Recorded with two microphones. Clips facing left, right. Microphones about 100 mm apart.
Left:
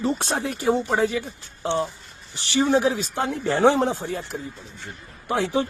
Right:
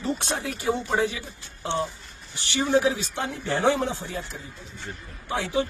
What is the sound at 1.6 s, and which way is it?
Speech, 30° left (ahead or behind).